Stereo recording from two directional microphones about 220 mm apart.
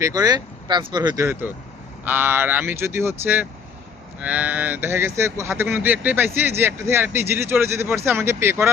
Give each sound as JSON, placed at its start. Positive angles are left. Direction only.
{"t": 0.0, "sound": "speech", "side_deg": -15}